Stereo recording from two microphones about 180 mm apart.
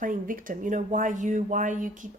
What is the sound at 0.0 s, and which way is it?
A woman's voice, 50° right (ahead or behind).